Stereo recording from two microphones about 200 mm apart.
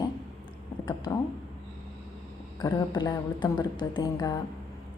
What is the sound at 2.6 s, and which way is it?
A woman's voice, 20° left (ahead or behind).